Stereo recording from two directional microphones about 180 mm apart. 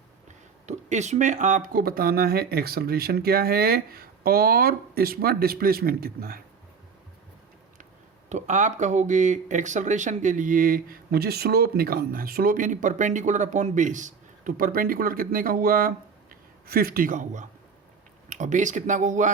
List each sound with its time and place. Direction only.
0.3 s speech: 40° right (ahead or behind); by 6.4 s 55° right (ahead or behind)
8.3 s speech: 40° right (ahead or behind)